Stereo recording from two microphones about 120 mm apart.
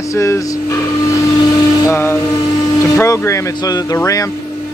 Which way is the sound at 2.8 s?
25° left (ahead or behind).